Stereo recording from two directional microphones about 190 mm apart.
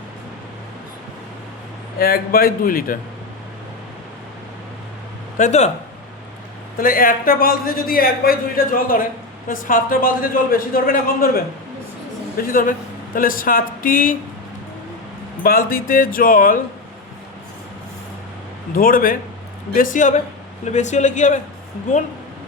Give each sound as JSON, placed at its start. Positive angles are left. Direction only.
{"t": 2.0, "sound": "a man's voice", "side_deg": 50}
{"t": 5.4, "sound": "speech", "side_deg": 35}
{"t": 6.7, "sound": "a man's voice", "side_deg": 45}
{"t": 15.4, "sound": "a man's voice", "side_deg": 50}
{"t": 18.7, "sound": "a man's voice", "side_deg": 50}